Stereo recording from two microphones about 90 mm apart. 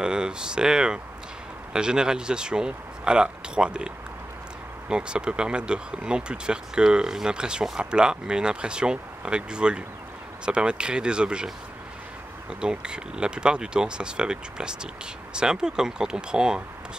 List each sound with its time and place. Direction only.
0.0 s speech: 10° right (ahead or behind)